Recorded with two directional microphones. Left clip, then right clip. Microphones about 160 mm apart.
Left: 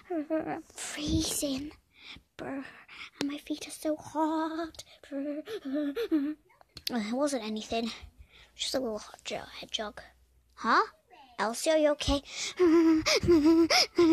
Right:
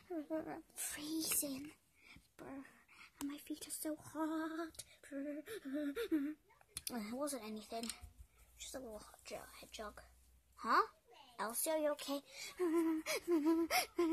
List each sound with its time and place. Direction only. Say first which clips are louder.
0.1 s a child's voice: left 12 dB; 20° left (ahead or behind)
2.0 s a sound: left 14 dB; 30° left (ahead or behind)
3.3 s speech: left 11 dB; 5° left (ahead or behind)
6.8 s a child's voice: left 13 dB; 25° left (ahead or behind); by 14.1 s 45° left (ahead or behind)